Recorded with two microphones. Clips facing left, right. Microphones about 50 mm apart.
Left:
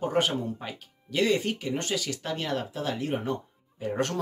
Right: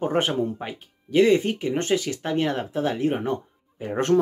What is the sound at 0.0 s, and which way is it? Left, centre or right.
Speech, right.